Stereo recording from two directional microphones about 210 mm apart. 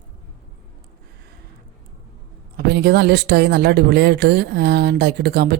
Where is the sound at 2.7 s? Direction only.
50° right (ahead or behind).